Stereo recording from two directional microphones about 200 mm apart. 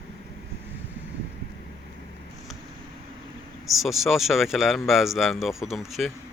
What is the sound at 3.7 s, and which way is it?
Speech, centre (ahead or behind).